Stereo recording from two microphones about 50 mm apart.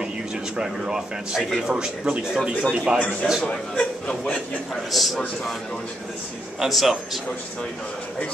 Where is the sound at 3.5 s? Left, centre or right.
Centre.